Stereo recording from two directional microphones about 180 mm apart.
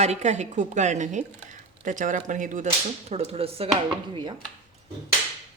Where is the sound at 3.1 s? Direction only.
35° right (ahead or behind).